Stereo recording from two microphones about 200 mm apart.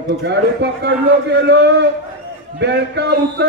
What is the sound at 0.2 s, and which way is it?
Speech, 60° right (ahead or behind).